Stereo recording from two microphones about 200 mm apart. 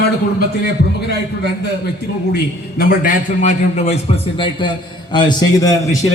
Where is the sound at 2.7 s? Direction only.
45° left (ahead or behind); by 6.0 s 15° left (ahead or behind).